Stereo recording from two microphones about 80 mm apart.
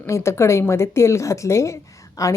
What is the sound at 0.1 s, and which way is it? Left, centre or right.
A woman's voice, left.